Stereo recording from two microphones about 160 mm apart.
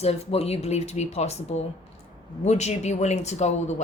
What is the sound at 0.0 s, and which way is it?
Speech, 40° left (ahead or behind).